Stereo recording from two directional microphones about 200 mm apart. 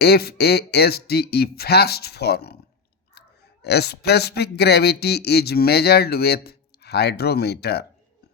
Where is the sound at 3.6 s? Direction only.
55° left (ahead or behind).